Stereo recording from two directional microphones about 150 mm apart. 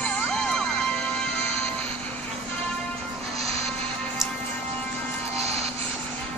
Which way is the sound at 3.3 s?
45° right (ahead or behind).